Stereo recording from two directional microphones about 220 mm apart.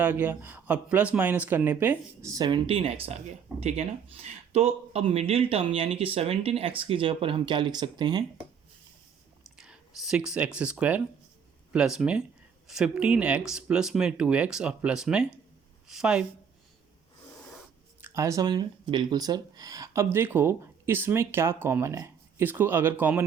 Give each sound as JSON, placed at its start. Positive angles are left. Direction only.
{"t": 0.0, "sound": "speech", "side_deg": -10}
{"t": 9.6, "sound": "speech", "side_deg": 0}
{"t": 18.0, "sound": "speech", "side_deg": -15}